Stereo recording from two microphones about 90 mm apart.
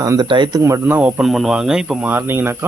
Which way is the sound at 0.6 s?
30° right (ahead or behind).